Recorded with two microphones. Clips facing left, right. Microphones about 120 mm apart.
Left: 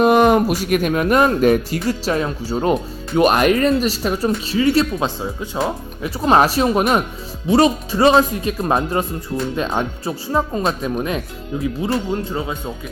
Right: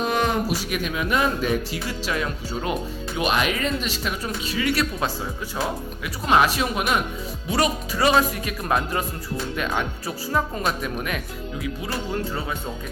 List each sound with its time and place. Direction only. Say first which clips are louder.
0.0 s speech: left 10 dB; 60° left (ahead or behind); by 2.7 s 30° left (ahead or behind)
3.2 s speech: left 9 dB; 50° left (ahead or behind); by 5.5 s 25° left (ahead or behind)
6.0 s speech: left 5 dB; 35° left (ahead or behind)
7.4 s speech: left 9 dB; 25° left (ahead or behind)